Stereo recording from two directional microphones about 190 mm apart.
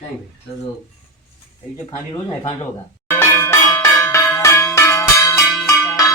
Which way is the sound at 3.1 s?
10° left (ahead or behind).